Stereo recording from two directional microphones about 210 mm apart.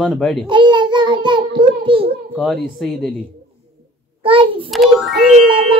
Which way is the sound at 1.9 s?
25° right (ahead or behind).